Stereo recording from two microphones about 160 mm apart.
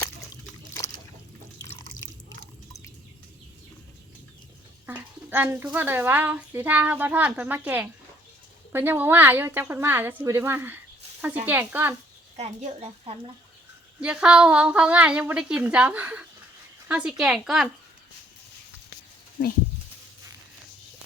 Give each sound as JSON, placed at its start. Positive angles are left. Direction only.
{"t": 4.9, "sound": "speech", "side_deg": -10}
{"t": 12.4, "sound": "a woman's voice", "side_deg": -45}
{"t": 14.0, "sound": "a woman's voice", "side_deg": -5}